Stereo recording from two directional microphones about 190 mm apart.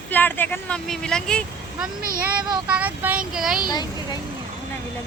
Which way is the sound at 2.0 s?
50° right (ahead or behind).